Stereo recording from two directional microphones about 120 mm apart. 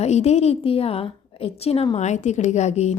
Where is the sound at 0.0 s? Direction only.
65° left (ahead or behind).